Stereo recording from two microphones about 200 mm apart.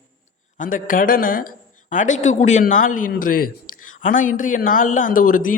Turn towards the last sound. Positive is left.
turn(degrees=45)  # may be behind; listen again after turning